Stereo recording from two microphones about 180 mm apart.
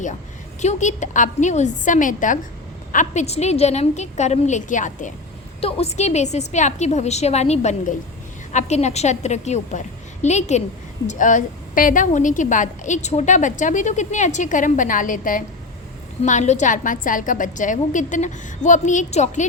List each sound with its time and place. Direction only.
0.6 s a woman's voice: 40° left (ahead or behind)
5.5 s a woman's voice: 35° left (ahead or behind)